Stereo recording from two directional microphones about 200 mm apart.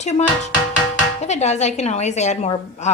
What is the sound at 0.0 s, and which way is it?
A woman's voice, 35° left (ahead or behind).